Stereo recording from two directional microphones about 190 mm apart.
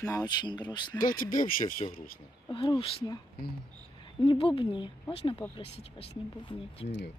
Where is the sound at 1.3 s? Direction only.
45° left (ahead or behind).